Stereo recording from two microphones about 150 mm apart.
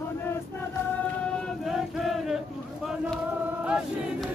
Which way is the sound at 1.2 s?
Centre (ahead or behind).